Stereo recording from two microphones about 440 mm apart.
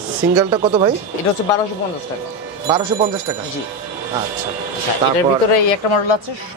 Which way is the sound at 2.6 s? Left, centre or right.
Centre.